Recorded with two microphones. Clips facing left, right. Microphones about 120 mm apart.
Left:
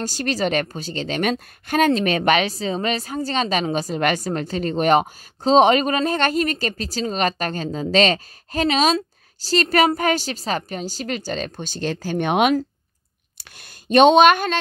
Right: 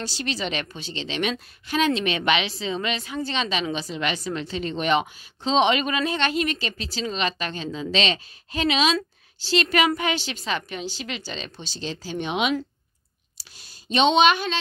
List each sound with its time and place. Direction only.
0.0 s a woman's voice: 45° left (ahead or behind)